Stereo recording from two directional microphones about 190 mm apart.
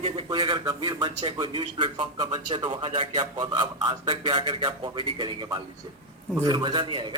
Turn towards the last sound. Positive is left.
turn(degrees=-25)  # may be behind; listen again after turning